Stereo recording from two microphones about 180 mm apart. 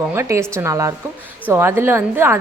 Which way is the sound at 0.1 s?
15° right (ahead or behind).